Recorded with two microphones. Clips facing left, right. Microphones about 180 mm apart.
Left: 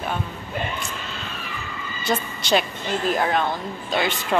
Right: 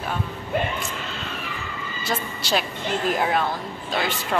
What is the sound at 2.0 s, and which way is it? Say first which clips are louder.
A woman's voice: left 4 dB; centre (ahead or behind).